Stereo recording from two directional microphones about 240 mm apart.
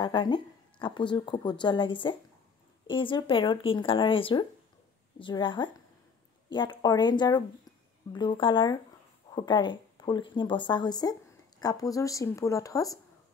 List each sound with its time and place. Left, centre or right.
0.0 s speech: centre